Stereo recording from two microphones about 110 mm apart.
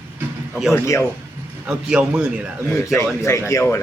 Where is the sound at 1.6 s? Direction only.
10° right (ahead or behind).